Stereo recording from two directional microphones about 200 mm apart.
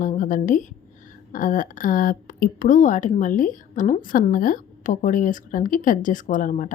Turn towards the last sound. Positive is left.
turn(degrees=40)  # may be behind; listen again after turning